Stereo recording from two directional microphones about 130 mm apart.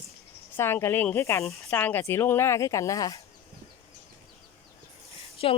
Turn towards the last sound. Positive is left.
turn(degrees=45)  # may be behind; listen again after turning